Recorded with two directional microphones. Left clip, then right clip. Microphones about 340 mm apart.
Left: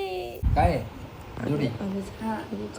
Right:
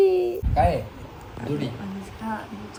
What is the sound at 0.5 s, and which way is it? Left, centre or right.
Speech, centre.